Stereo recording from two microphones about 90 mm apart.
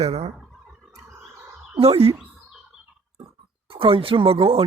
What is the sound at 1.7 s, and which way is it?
Speech, 90° right.